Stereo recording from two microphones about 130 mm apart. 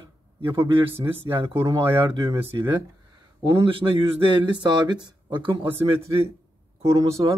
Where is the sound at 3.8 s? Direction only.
20° right (ahead or behind).